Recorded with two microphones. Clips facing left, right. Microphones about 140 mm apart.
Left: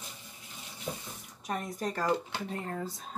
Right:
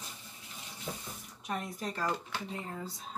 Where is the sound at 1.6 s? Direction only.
45° left (ahead or behind).